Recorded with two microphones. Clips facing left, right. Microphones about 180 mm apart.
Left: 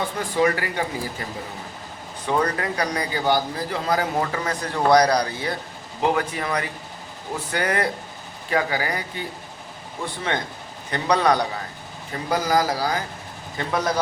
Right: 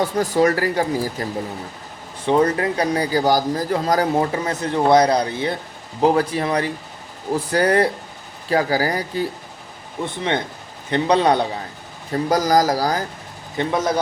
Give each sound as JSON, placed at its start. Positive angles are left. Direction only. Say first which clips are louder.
{"t": 0.0, "sound": "a man's voice", "louder": "right 4 dB", "side_deg": -40}
{"t": 2.2, "sound": "a man's voice", "louder": "right 6 dB", "side_deg": -30}
{"t": 4.2, "sound": "a man's voice", "louder": "right 4 dB", "side_deg": -25}
{"t": 10.9, "sound": "speech", "louder": "right 4 dB", "side_deg": -25}
{"t": 12.1, "sound": "a man's voice", "louder": "right 5 dB", "side_deg": -40}
{"t": 13.6, "sound": "speech", "louder": "right 4 dB", "side_deg": -20}